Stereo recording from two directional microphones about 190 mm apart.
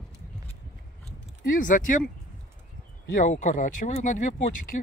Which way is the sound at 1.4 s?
45° left (ahead or behind).